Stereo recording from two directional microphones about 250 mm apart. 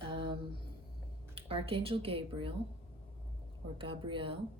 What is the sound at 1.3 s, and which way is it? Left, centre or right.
A woman's voice, right.